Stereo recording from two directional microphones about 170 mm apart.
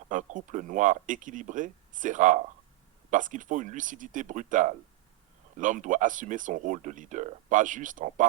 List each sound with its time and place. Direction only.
0.1 s speech: 50° right (ahead or behind)